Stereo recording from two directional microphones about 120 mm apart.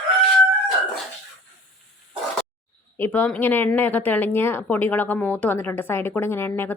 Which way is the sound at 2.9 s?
15° left (ahead or behind).